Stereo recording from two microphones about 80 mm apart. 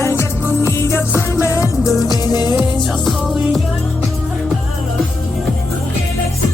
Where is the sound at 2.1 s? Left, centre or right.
Left.